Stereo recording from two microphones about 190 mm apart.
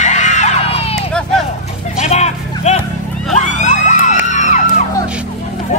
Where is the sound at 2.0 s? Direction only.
35° left (ahead or behind).